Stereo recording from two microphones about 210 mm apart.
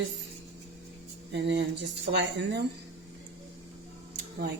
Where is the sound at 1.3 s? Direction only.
55° right (ahead or behind).